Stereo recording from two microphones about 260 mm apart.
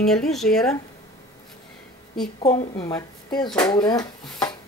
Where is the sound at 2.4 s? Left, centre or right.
Centre.